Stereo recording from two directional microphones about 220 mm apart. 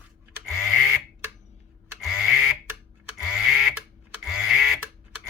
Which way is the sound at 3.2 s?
Centre (ahead or behind).